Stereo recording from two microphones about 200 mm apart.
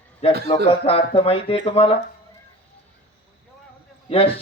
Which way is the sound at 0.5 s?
25° left (ahead or behind).